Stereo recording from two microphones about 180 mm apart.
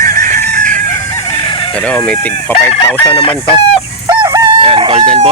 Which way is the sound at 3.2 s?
30° left (ahead or behind).